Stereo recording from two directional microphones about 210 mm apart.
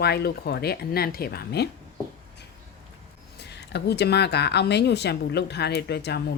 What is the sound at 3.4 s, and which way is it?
Speech, 50° left (ahead or behind).